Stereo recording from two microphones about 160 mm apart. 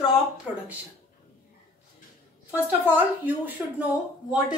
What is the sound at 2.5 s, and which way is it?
A woman's voice, 10° right (ahead or behind).